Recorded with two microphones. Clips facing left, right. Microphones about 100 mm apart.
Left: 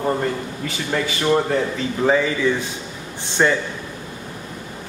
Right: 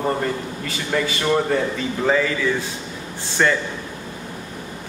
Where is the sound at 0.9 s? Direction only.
Centre (ahead or behind).